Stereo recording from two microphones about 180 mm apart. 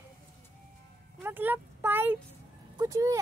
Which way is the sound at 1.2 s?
10° right (ahead or behind).